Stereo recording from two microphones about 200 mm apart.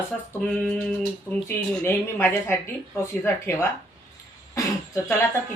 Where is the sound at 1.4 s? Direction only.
10° left (ahead or behind).